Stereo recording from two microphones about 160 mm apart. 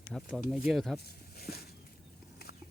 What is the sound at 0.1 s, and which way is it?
Speech, centre (ahead or behind).